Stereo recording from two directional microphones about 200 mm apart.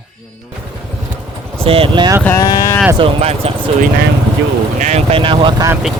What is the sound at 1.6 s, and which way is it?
Speech, 25° right (ahead or behind).